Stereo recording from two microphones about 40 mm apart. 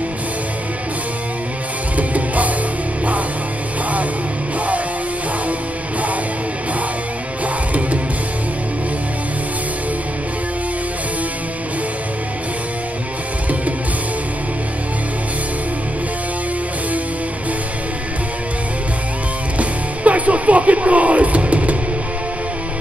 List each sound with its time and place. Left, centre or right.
2.0 s music: right
19.6 s music: right